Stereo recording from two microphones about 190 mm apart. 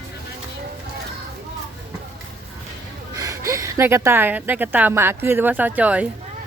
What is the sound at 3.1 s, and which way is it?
A woman's voice, 15° right (ahead or behind).